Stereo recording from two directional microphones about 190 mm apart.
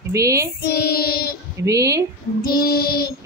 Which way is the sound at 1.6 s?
15° right (ahead or behind).